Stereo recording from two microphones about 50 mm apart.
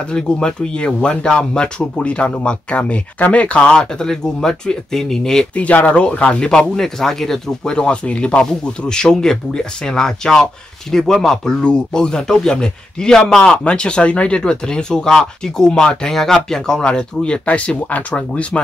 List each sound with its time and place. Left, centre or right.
0.1 s speech: centre
5.5 s speech: left
6.8 s a man's voice: centre
11.6 s a man's voice: centre